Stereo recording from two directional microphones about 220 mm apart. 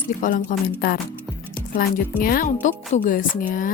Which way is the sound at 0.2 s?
35° left (ahead or behind).